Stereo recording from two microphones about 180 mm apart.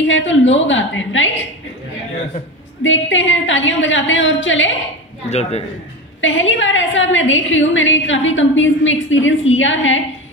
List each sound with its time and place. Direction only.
0.0 s a woman's voice: 90° left
2.8 s a woman's voice: 90° left
5.3 s a man's voice: 35° left (ahead or behind)
6.2 s a woman's voice: 90° left